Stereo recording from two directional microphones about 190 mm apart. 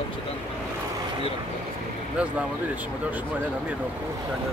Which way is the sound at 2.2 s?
5° right (ahead or behind).